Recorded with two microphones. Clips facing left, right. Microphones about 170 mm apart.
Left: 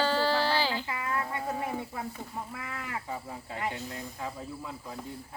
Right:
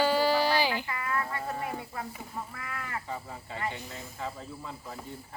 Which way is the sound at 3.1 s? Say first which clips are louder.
Left 1 dB; 5° left (ahead or behind).